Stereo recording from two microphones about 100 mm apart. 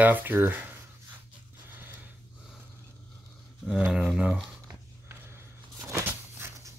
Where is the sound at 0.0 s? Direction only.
20° right (ahead or behind).